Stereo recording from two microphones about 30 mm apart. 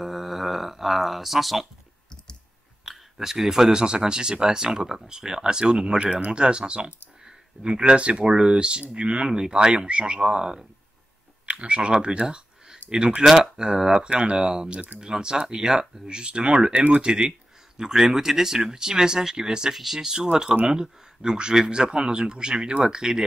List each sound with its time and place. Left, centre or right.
0.0 s speech: centre
3.2 s speech: centre; by 10.2 s right
10.2 s speech: right
11.4 s speech: right
13.7 s speech: centre
14.0 s speech: right
14.3 s speech: right
19.7 s speech: centre
20.0 s speech: right